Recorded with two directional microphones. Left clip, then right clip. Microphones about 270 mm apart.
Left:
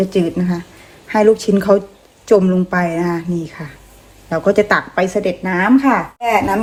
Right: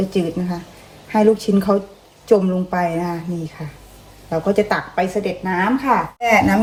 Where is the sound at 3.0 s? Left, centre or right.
Left.